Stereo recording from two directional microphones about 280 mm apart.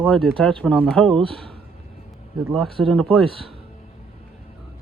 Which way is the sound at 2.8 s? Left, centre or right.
Centre.